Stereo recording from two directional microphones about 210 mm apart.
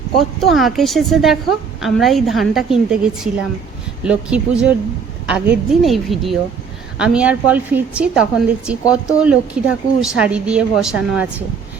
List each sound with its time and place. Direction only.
0.3 s a woman's voice: centre (ahead or behind)